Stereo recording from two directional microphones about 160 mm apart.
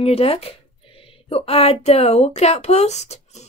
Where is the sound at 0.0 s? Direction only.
40° left (ahead or behind).